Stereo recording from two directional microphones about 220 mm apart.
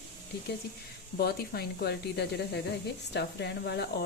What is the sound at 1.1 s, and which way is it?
Speech, 45° left (ahead or behind).